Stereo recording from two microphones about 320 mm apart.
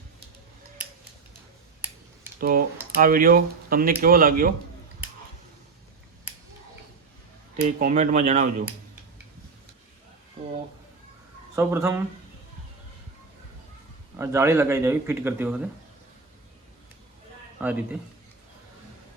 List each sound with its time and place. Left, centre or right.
2.4 s speech: right
7.5 s speech: right
11.5 s speech: centre
14.2 s speech: centre
17.6 s a man's voice: centre